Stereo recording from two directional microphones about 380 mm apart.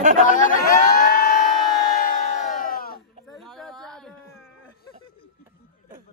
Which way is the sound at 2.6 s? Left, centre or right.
Left.